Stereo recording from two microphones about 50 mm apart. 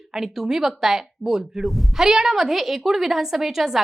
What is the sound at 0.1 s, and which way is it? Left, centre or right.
A woman's voice, centre.